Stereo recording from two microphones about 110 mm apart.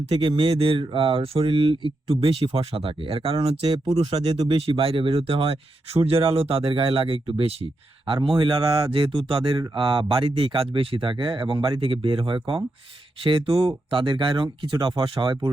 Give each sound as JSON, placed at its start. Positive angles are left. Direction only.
{"t": 0.1, "sound": "speech", "side_deg": -55}